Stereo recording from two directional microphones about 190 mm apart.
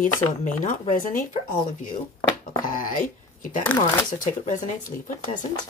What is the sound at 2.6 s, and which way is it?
Speech, 45° left (ahead or behind).